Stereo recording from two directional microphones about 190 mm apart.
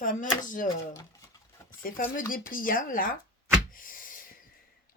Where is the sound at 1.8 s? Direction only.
45° left (ahead or behind).